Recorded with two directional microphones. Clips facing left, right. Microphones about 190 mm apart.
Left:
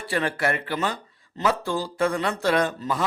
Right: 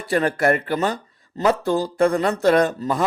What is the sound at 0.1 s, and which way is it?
Speech, 45° right (ahead or behind).